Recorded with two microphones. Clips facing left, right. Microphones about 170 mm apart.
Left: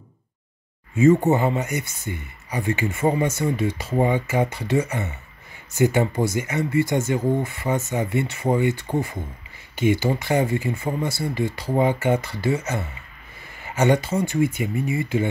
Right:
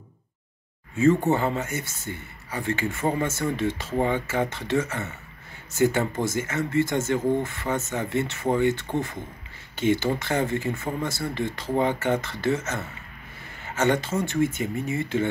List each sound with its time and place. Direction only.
1.3 s speech: 15° left (ahead or behind)